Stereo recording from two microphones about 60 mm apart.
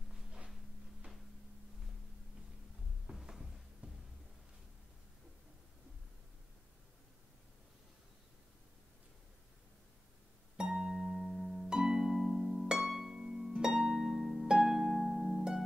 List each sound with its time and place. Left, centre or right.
3.1 s cupboard open or close: centre
3.8 s music: centre
10.6 s harp: centre